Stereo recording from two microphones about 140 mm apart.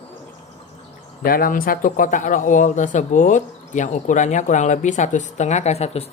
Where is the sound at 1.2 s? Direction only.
90° left; by 6.1 s 50° left (ahead or behind).